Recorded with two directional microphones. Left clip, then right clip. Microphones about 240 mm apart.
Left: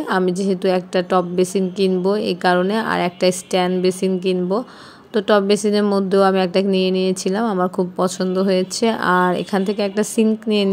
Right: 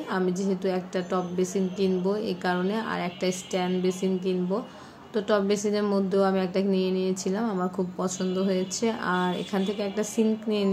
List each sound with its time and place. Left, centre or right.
0.1 s a woman's voice: left